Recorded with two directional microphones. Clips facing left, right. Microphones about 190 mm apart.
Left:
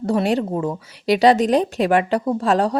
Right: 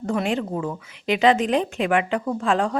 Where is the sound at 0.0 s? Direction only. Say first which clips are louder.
Left 5 dB; 35° left (ahead or behind).